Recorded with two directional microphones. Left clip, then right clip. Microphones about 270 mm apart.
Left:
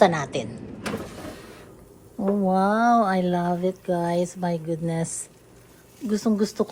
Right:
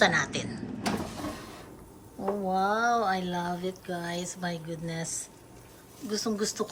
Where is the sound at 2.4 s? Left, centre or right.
Left.